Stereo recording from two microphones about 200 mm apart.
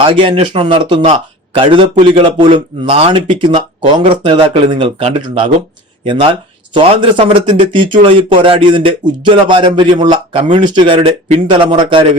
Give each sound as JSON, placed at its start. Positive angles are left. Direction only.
{"t": 0.0, "sound": "speech", "side_deg": -25}
{"t": 6.7, "sound": "speech", "side_deg": -25}